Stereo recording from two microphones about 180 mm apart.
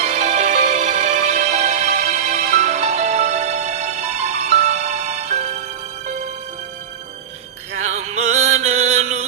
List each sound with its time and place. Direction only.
0.0 s music: 40° right (ahead or behind)
7.8 s music: 35° right (ahead or behind)